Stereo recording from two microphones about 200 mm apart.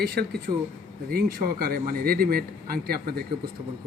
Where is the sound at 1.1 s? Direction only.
50° right (ahead or behind).